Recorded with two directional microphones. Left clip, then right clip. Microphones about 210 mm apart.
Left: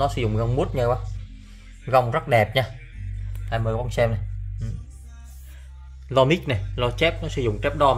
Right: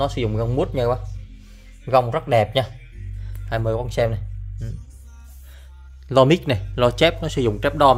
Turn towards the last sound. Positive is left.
turn(degrees=-30)  # may be behind; listen again after turning